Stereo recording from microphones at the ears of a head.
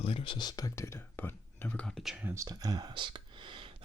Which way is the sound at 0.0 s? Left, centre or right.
Left.